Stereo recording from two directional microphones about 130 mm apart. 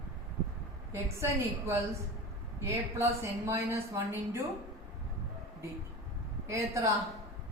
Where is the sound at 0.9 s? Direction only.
20° right (ahead or behind).